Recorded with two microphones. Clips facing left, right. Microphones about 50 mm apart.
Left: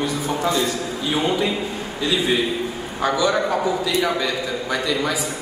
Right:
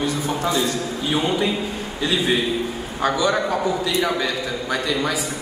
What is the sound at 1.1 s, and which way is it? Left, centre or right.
Speech, centre.